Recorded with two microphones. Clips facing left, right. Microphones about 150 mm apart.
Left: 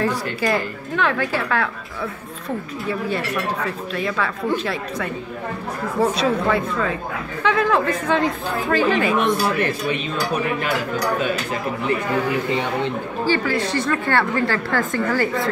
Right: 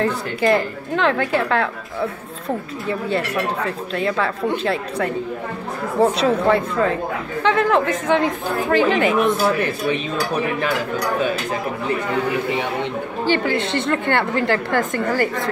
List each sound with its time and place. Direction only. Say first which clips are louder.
0.0 s a woman's voice: right 2 dB; 25° right (ahead or behind)
3.9 s a woman's voice: right 4 dB; 30° right (ahead or behind)
13.3 s a woman's voice: right 1 dB; 20° right (ahead or behind)